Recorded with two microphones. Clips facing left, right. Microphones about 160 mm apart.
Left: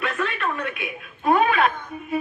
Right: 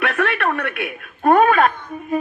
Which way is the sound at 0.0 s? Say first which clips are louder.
Right 6 dB; 70° right (ahead or behind).